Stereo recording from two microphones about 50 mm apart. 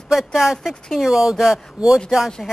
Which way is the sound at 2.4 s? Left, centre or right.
Centre.